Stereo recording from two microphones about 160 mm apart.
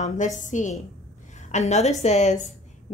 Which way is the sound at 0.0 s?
50° left (ahead or behind).